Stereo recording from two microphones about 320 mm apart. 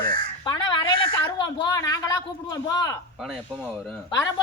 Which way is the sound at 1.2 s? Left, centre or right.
Centre.